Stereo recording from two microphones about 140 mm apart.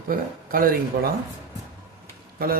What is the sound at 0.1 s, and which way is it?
Speech, 90° right.